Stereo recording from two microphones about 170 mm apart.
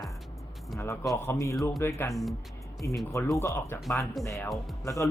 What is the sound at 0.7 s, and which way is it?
Speech, 15° left (ahead or behind).